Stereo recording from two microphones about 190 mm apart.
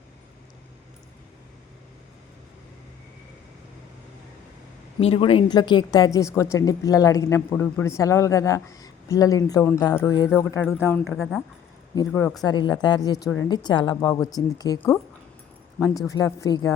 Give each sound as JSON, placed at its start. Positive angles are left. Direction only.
{"t": 4.9, "sound": "speech", "side_deg": 30}
{"t": 16.0, "sound": "speech", "side_deg": 15}